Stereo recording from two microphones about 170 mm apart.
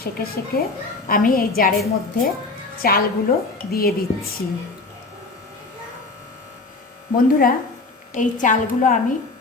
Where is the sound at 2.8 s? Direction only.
60° left (ahead or behind).